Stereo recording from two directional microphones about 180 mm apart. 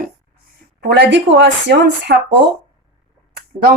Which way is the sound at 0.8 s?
75° right (ahead or behind).